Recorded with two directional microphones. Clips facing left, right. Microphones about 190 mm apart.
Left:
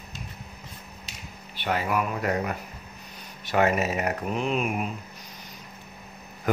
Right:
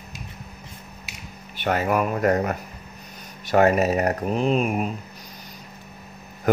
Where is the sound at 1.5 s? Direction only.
45° right (ahead or behind).